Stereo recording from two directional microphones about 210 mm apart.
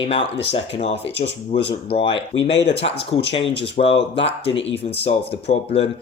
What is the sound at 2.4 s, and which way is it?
Speech, 55° left (ahead or behind).